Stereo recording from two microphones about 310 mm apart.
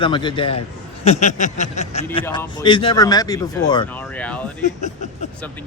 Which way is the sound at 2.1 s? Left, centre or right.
Centre.